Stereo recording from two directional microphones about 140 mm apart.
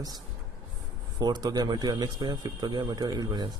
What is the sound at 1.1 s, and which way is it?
Speech, 30° right (ahead or behind).